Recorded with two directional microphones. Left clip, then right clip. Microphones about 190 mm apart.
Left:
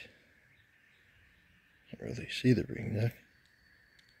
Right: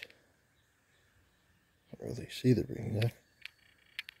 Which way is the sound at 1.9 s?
Centre (ahead or behind).